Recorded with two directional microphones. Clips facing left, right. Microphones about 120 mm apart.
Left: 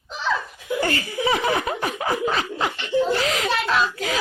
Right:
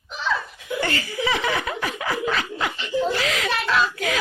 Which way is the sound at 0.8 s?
35° left (ahead or behind).